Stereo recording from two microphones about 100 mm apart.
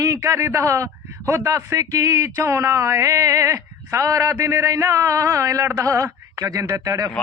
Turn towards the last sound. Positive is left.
turn(degrees=-35)  # may be behind; listen again after turning